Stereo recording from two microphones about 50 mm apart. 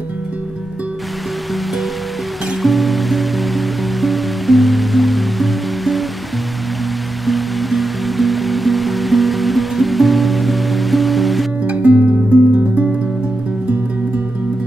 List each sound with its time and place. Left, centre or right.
2.6 s music: centre
7.2 s music: centre
11.6 s music: right